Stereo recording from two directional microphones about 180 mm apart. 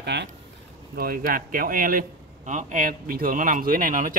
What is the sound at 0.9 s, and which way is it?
A man's voice, 55° right (ahead or behind).